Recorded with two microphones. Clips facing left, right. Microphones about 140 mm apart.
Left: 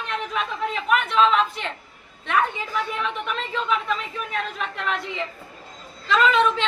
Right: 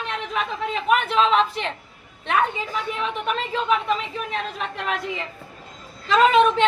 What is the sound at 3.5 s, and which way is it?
Speech, 30° right (ahead or behind).